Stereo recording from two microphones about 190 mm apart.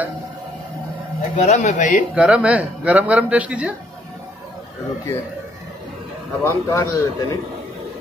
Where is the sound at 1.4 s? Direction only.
35° left (ahead or behind).